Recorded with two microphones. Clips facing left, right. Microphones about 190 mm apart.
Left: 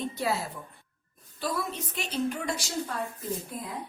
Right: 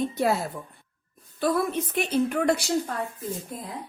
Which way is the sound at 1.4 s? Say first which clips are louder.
Right 8 dB; 55° right (ahead or behind).